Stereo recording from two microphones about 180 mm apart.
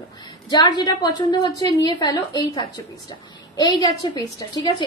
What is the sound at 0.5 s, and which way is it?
A woman's voice, 20° left (ahead or behind).